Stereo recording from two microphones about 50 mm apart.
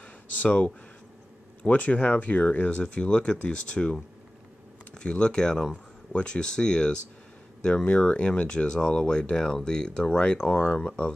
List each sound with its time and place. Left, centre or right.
0.4 s speech: left
4.9 s speech: centre